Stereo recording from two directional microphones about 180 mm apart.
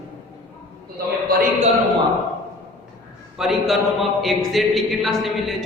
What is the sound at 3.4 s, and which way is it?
A man's voice, centre (ahead or behind).